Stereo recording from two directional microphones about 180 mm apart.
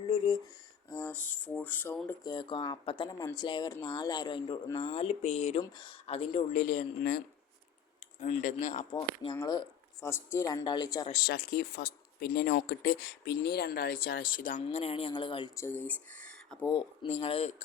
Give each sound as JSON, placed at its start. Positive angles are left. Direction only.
{"t": 0.9, "sound": "speech", "side_deg": 15}
{"t": 2.2, "sound": "speech", "side_deg": 25}
{"t": 4.9, "sound": "speech", "side_deg": 35}
{"t": 5.6, "sound": "speech", "side_deg": 25}
{"t": 8.2, "sound": "speech", "side_deg": 40}
{"t": 9.3, "sound": "speech", "side_deg": 20}
{"t": 11.1, "sound": "speech", "side_deg": 60}
{"t": 14.6, "sound": "speech", "side_deg": 35}
{"t": 15.5, "sound": "speech", "side_deg": 15}
{"t": 16.6, "sound": "speech", "side_deg": 25}